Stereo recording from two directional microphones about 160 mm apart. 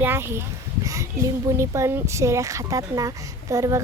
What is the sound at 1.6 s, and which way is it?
Speech, 15° right (ahead or behind).